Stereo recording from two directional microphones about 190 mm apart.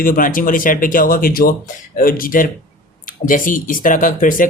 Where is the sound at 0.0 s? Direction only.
45° left (ahead or behind).